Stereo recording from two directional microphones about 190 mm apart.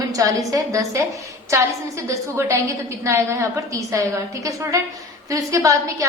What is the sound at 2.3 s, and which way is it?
A woman's voice, 15° right (ahead or behind).